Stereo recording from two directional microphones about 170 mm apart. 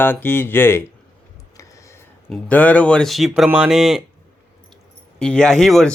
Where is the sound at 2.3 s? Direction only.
10° left (ahead or behind).